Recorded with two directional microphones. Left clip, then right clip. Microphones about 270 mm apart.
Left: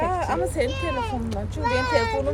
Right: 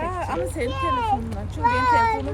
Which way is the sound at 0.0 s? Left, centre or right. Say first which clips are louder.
Left 2 dB; left.